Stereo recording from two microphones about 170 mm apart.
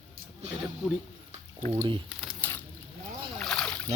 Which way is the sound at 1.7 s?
35° right (ahead or behind).